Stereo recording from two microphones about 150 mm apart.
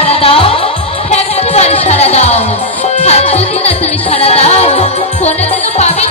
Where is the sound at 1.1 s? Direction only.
45° left (ahead or behind).